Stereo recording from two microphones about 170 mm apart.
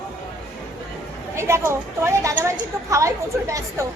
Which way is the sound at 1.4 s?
15° right (ahead or behind).